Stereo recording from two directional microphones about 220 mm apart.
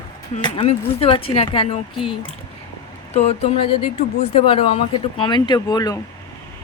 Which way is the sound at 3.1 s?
30° left (ahead or behind).